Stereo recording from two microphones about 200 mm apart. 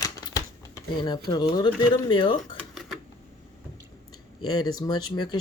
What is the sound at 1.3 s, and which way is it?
Speech, 20° left (ahead or behind).